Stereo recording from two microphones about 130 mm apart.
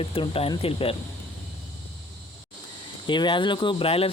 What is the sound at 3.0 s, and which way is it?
Speech, 35° left (ahead or behind).